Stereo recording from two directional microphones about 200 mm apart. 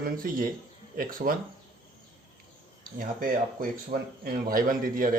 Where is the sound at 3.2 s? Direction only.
45° right (ahead or behind).